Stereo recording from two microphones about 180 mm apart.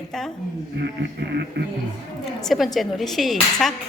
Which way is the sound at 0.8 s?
70° right (ahead or behind).